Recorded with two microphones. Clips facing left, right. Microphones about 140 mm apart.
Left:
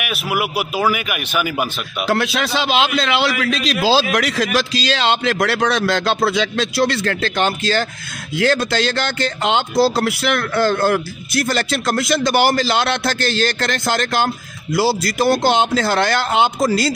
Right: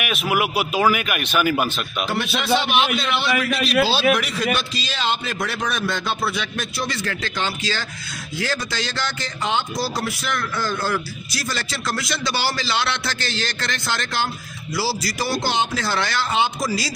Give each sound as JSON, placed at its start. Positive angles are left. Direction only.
{"t": 0.0, "sound": "a man's voice", "side_deg": 5}
{"t": 2.0, "sound": "a man's voice", "side_deg": 90}